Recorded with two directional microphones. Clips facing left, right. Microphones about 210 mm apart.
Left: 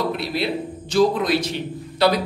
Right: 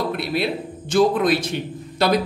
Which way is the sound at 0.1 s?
55° right (ahead or behind).